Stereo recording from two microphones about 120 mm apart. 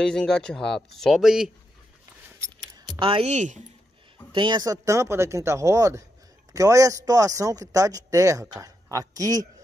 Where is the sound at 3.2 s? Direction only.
80° right.